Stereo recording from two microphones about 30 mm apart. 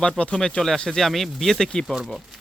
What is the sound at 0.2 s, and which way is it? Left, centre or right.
Speech, left.